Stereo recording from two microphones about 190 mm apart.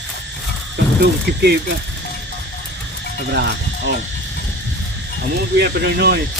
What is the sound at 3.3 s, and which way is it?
Speech, 65° right (ahead or behind).